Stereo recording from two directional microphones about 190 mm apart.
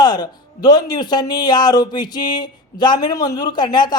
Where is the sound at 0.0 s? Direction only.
20° left (ahead or behind).